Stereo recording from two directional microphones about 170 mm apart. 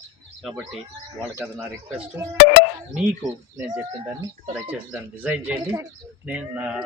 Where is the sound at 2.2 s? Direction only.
15° right (ahead or behind).